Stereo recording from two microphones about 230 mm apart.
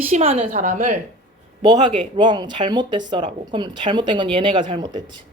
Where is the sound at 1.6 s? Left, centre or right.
Centre.